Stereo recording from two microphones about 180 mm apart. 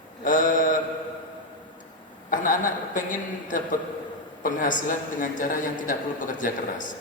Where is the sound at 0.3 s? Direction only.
45° left (ahead or behind).